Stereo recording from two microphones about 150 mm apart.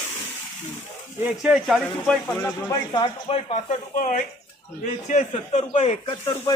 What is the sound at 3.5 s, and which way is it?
Speech, 60° left (ahead or behind).